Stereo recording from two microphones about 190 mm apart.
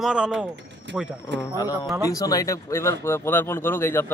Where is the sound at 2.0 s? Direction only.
20° left (ahead or behind).